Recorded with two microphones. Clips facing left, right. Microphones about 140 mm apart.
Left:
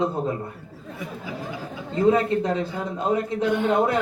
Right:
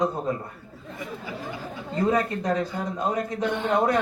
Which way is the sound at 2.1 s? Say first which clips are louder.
Left 5 dB; 25° left (ahead or behind).